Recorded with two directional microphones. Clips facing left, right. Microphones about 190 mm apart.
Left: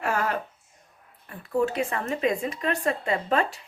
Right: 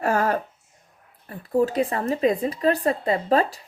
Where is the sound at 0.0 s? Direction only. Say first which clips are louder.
Right 5 dB; 40° right (ahead or behind).